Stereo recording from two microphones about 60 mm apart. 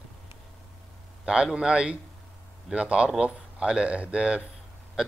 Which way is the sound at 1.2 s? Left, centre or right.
Centre.